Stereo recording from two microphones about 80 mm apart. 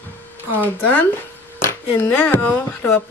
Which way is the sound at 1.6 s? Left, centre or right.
Left.